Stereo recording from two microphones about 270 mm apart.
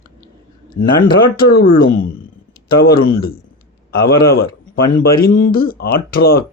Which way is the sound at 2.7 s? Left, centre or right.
Left.